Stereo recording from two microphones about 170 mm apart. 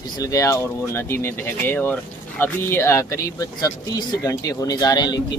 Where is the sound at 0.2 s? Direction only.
20° left (ahead or behind).